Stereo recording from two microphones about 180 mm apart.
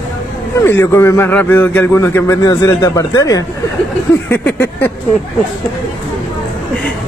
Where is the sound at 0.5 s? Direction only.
15° left (ahead or behind).